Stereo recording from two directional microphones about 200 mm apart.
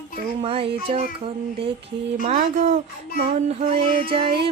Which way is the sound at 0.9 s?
30° right (ahead or behind).